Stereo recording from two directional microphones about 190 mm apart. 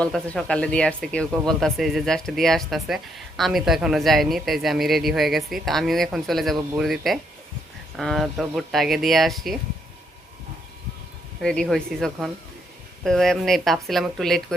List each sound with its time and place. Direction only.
0.0 s speech: 5° left (ahead or behind)
11.3 s speech: centre (ahead or behind)